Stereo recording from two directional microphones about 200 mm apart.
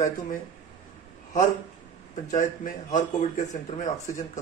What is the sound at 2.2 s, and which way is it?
Speech, 40° left (ahead or behind).